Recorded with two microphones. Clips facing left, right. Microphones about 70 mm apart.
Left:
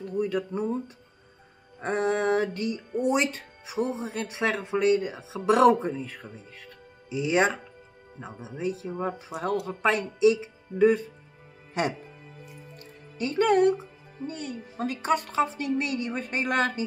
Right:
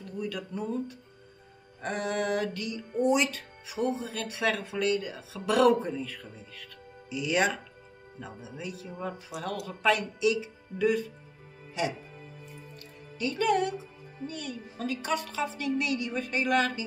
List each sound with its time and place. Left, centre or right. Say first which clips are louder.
0.2 s a sound: left 7 dB; left
1.8 s music: left 5 dB; left
3.1 s speech: left 1 dB; left
13.2 s speech: left 5 dB; left